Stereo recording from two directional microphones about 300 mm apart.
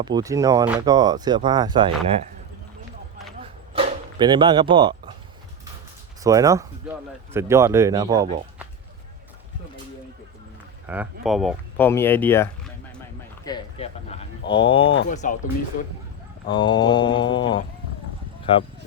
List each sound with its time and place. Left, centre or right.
0.0 s speech: centre
3.4 s dog: centre
6.2 s speech: centre
10.8 s speech: centre
13.4 s a sound: centre
15.1 s speech: left
16.5 s mantra: centre